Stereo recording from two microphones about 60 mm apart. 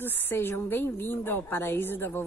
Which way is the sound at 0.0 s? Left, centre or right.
Left.